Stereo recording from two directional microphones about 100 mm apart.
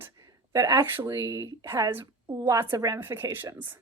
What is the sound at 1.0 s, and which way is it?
Speech, 35° right (ahead or behind).